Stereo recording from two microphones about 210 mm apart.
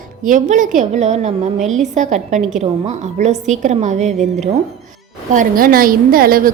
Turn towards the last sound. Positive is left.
turn(degrees=-45)  # may be behind; listen again after turning